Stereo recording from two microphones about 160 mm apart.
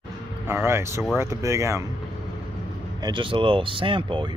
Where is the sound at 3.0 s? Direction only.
30° right (ahead or behind).